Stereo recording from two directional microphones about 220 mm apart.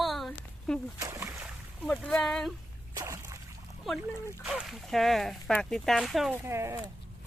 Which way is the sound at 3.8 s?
Centre (ahead or behind).